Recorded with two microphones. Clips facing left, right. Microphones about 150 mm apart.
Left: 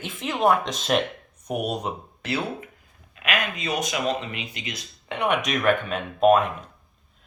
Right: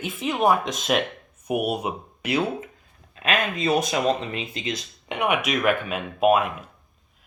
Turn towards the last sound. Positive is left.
turn(degrees=-5)  # may be behind; listen again after turning